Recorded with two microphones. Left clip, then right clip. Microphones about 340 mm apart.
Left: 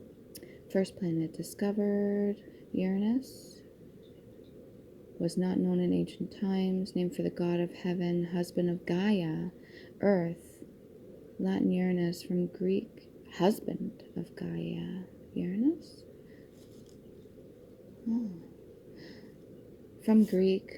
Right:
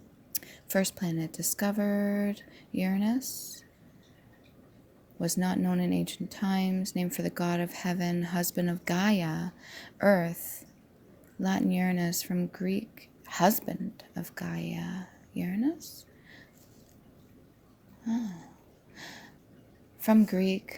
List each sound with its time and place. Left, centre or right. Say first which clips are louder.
0.3 s speech: right 2 dB; right
5.2 s speech: right 1 dB; right
11.4 s a woman's voice: right 1 dB; right
18.0 s a sound: right 1 dB; right
20.0 s speech: right 1 dB; right